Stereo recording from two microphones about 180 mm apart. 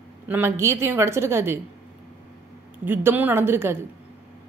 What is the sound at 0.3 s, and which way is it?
A woman's voice, 10° right (ahead or behind).